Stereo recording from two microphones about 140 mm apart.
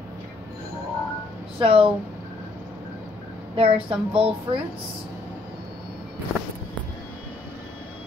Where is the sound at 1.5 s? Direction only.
40° right (ahead or behind).